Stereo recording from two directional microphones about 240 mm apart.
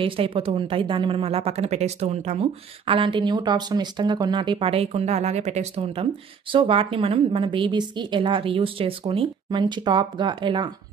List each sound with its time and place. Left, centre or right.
0.0 s speech: right